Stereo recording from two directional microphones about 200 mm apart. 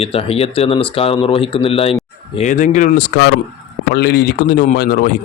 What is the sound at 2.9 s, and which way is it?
Speech, 60° left (ahead or behind).